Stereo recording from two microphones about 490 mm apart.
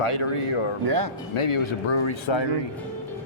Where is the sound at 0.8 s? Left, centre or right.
Right.